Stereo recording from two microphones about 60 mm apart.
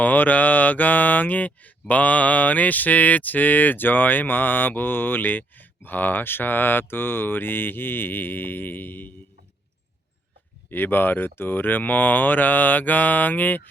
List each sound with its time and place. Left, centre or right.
0.0 s mantra: left
10.7 s mantra: left